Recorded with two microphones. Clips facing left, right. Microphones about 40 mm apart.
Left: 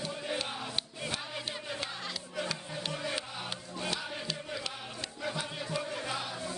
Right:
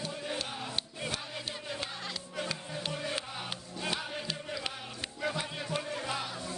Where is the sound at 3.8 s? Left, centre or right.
Centre.